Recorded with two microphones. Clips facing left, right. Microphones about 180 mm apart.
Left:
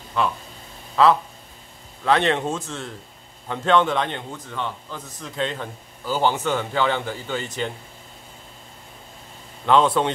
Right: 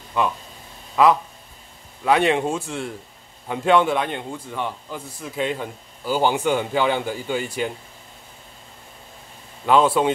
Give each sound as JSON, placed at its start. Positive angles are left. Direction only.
{"t": 0.2, "sound": "a man's voice", "side_deg": -15}
{"t": 9.7, "sound": "a man's voice", "side_deg": -10}